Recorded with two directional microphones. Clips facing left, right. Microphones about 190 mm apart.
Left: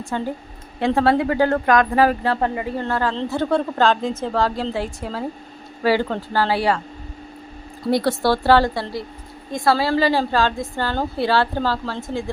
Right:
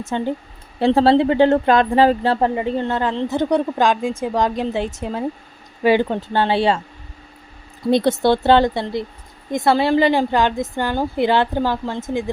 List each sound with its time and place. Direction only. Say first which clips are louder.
0.0 s speech: right 3 dB; 20° right (ahead or behind)
7.9 s speech: right 3 dB; 20° right (ahead or behind)